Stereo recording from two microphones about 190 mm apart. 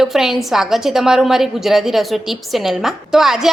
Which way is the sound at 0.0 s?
Centre (ahead or behind).